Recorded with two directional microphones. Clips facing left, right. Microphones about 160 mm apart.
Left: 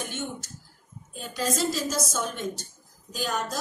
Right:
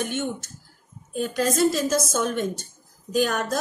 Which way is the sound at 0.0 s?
55° right (ahead or behind).